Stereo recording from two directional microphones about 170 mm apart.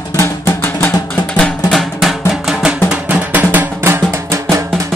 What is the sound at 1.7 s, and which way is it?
Drum, centre (ahead or behind).